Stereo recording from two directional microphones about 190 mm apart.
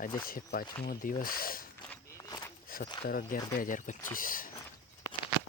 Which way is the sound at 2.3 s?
20° left (ahead or behind).